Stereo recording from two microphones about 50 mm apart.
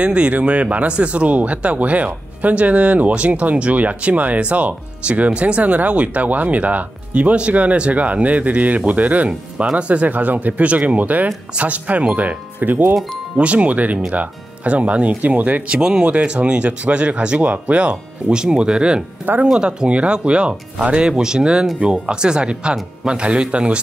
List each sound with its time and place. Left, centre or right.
0.0 s speech: right
13.4 s speech: right
15.8 s speech: centre
16.1 s speech: right